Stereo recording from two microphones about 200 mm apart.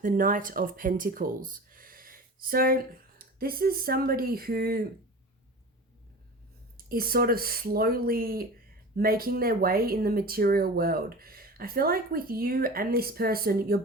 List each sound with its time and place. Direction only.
0.0 s speech: 40° right (ahead or behind)
6.7 s speech: 45° right (ahead or behind)